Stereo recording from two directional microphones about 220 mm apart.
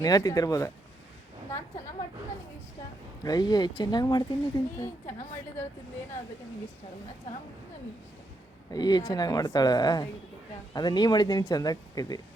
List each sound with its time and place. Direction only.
0.0 s speech: 15° left (ahead or behind)
3.2 s speech: 20° left (ahead or behind)
8.7 s speech: 20° left (ahead or behind)